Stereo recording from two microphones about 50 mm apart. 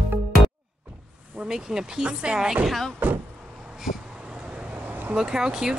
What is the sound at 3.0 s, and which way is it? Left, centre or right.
Vehicle, right.